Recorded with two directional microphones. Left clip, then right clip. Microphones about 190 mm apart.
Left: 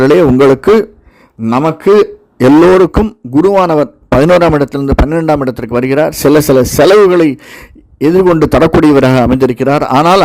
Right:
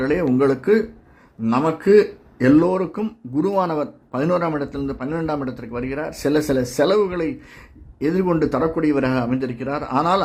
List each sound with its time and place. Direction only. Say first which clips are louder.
0.0 s a man's voice: left 13 dB; 50° left (ahead or behind)